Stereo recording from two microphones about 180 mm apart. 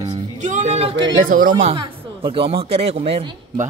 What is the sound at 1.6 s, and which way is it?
Speech, 30° right (ahead or behind).